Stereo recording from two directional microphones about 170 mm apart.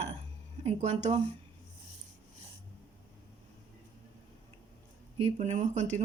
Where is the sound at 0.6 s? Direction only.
40° right (ahead or behind).